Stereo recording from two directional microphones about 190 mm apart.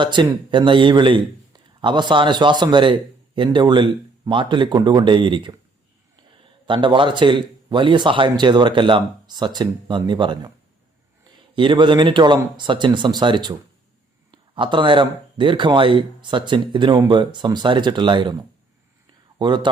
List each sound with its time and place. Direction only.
0.0 s speech: 25° right (ahead or behind)
11.5 s speech: 25° right (ahead or behind)
19.4 s speech: 25° right (ahead or behind)